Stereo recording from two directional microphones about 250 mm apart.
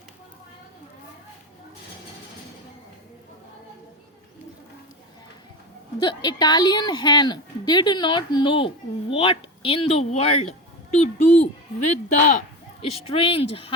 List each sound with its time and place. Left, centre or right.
6.0 s a woman's voice: centre